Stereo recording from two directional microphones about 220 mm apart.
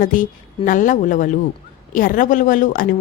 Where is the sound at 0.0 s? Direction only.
40° left (ahead or behind).